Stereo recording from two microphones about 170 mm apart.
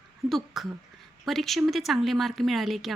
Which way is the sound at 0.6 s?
Centre (ahead or behind).